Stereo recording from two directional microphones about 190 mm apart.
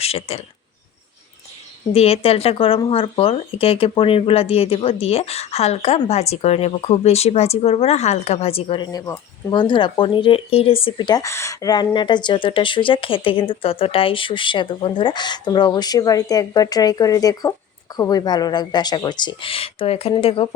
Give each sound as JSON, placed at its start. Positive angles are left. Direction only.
{"t": 0.0, "sound": "speech", "side_deg": 30}
{"t": 1.9, "sound": "speech", "side_deg": 30}